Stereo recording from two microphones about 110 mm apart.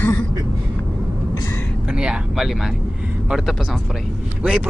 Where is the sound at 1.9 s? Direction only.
10° right (ahead or behind).